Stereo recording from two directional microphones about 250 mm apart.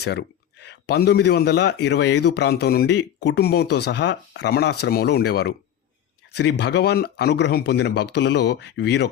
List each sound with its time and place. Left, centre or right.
0.0 s speech: left